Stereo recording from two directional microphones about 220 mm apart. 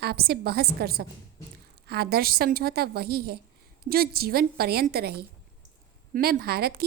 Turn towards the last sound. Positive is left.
turn(degrees=-45)  # may be behind; listen again after turning